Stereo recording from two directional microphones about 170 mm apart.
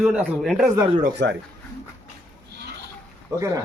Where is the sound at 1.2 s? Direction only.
90° right.